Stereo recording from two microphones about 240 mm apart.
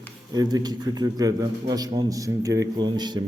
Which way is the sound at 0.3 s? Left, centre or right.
Centre.